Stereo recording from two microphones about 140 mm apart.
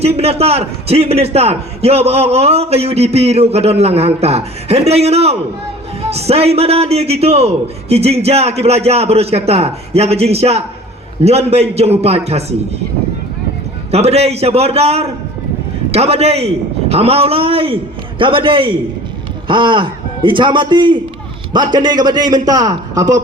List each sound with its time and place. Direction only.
0.0 s a man's voice: 45° right (ahead or behind)
13.9 s a man's voice: 50° right (ahead or behind); by 23.2 s 25° right (ahead or behind)